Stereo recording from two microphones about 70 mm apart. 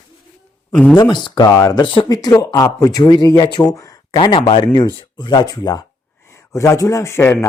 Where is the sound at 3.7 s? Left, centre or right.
Left.